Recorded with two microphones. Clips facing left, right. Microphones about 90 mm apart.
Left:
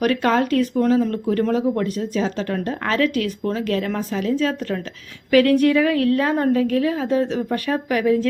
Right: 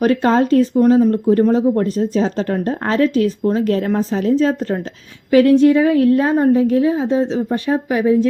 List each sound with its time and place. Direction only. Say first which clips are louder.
0.0 s a woman's voice: right 4 dB; 30° right (ahead or behind)